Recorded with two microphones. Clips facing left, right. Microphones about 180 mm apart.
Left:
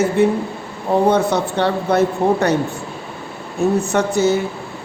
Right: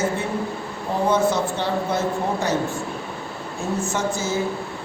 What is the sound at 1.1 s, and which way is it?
Speech, 65° left (ahead or behind).